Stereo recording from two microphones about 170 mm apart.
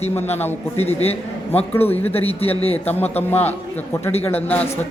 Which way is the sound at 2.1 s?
35° left (ahead or behind).